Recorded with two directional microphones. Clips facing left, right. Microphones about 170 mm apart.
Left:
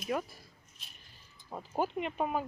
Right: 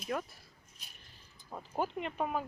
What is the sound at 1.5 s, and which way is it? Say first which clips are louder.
Speech: left 2 dB; 5° left (ahead or behind).